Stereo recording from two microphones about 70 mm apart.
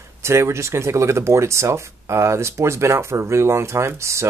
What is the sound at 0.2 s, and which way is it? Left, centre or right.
Speech, right.